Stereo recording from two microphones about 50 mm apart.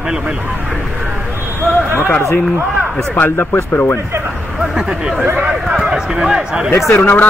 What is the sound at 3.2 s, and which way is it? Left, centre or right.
Speech, left.